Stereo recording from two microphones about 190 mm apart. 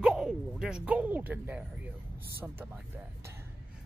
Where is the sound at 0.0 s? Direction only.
5° right (ahead or behind).